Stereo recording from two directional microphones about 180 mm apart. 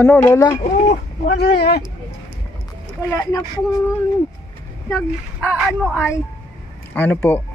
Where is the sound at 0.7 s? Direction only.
40° left (ahead or behind).